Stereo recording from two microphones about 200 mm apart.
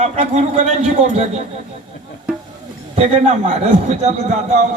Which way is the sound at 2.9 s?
35° right (ahead or behind).